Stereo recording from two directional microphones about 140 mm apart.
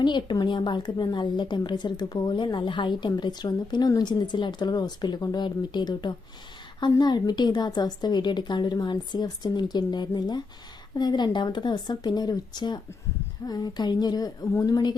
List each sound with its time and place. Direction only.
0.0 s a woman's voice: 35° left (ahead or behind)